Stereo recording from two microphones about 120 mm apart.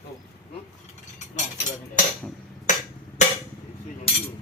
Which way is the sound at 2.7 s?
90° left.